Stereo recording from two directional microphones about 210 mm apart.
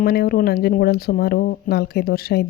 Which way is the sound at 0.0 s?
45° left (ahead or behind).